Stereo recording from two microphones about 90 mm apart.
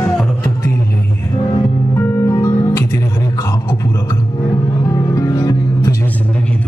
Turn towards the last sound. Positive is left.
turn(degrees=40)  # may be behind; listen again after turning